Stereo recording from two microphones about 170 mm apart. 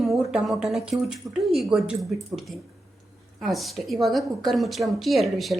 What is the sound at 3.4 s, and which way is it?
A woman's voice, centre (ahead or behind).